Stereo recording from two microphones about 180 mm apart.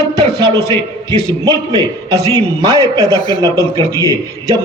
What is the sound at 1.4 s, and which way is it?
A man's voice, 20° right (ahead or behind).